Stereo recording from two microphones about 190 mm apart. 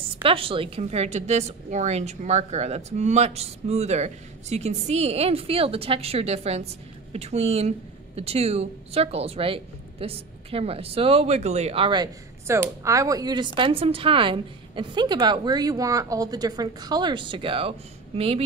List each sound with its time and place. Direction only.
0.2 s a woman's voice: 30° right (ahead or behind)